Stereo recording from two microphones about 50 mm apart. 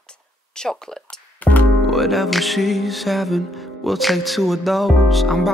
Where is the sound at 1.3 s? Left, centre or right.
Left.